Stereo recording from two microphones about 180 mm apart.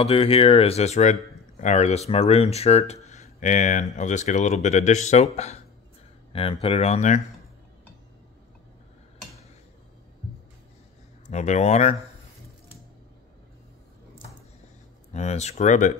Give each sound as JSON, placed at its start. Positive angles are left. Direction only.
{"t": 0.0, "sound": "speech", "side_deg": 30}
{"t": 11.2, "sound": "speech", "side_deg": 40}
{"t": 15.1, "sound": "speech", "side_deg": 40}